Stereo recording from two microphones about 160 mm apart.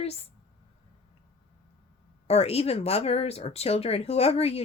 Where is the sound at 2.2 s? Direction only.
40° left (ahead or behind).